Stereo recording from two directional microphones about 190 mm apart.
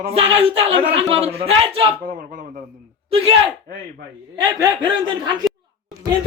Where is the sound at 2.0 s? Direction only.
45° right (ahead or behind).